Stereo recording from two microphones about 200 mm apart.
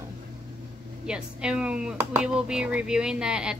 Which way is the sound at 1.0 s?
5° right (ahead or behind).